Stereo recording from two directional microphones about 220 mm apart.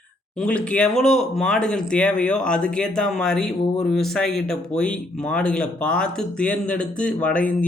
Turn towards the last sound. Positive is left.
turn(degrees=5)  # may be behind; listen again after turning